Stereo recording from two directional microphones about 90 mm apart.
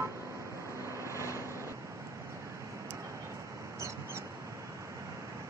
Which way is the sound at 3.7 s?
30° right (ahead or behind).